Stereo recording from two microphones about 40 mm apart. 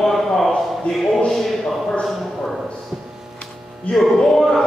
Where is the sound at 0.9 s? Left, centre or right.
Centre.